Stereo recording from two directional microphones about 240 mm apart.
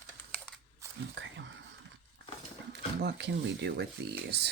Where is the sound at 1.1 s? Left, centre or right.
Right.